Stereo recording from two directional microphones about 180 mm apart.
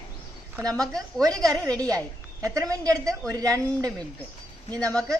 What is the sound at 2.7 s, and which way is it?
A woman's voice, 20° right (ahead or behind).